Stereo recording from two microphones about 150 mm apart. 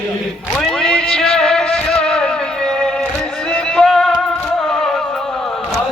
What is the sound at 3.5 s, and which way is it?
Music, 5° left (ahead or behind).